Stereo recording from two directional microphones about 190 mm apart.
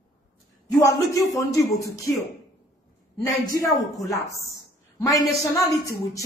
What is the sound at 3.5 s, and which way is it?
Speech, 15° left (ahead or behind).